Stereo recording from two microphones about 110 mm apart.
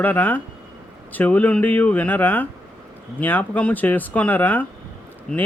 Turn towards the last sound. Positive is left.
turn(degrees=10)  # may be behind; listen again after turning